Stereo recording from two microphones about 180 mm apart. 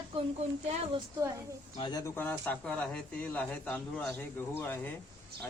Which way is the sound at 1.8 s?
20° left (ahead or behind).